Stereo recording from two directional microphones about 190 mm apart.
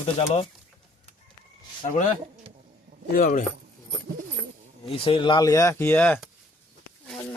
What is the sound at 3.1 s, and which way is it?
Speech, 50° left (ahead or behind).